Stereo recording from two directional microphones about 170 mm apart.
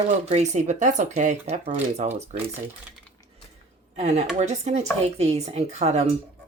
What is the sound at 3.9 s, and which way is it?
A woman's voice, 40° right (ahead or behind).